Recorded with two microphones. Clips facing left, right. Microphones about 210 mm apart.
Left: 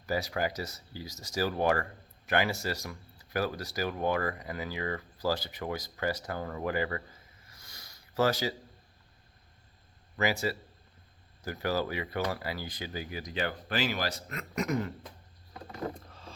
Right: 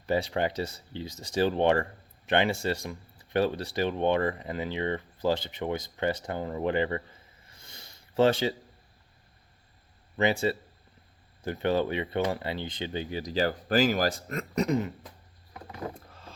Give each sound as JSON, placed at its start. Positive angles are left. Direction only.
{"t": 0.0, "sound": "speech", "side_deg": -30}
{"t": 10.2, "sound": "speech", "side_deg": -25}
{"t": 16.0, "sound": "vehicle", "side_deg": -5}